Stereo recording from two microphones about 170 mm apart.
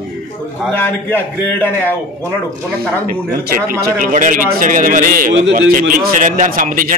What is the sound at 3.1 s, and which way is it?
A man's voice, 60° right (ahead or behind).